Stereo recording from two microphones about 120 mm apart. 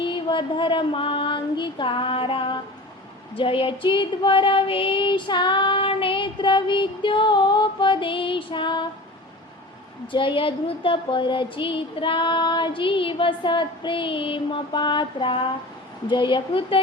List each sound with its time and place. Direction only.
0.0 s female singing: 40° left (ahead or behind)
10.1 s female singing: 45° left (ahead or behind)